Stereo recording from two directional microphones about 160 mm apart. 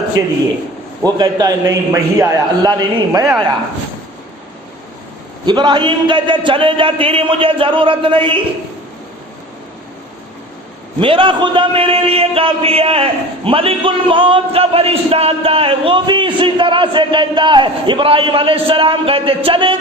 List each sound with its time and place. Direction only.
1.0 s a man's voice: 25° right (ahead or behind)
5.5 s a man's voice: 30° right (ahead or behind)
11.0 s a man's voice: 35° right (ahead or behind)